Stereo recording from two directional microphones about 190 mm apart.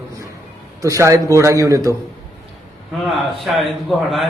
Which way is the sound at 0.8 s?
15° right (ahead or behind).